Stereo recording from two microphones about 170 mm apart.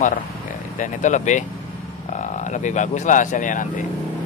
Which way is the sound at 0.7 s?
45° left (ahead or behind).